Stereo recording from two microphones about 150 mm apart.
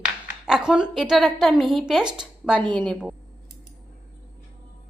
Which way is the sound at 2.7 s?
5° left (ahead or behind).